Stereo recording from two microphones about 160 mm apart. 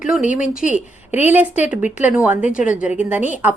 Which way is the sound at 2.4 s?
50° left (ahead or behind).